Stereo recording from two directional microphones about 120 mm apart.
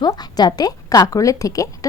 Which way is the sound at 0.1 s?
35° left (ahead or behind).